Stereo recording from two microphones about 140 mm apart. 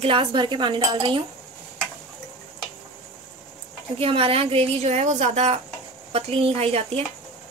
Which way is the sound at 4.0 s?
40° right (ahead or behind).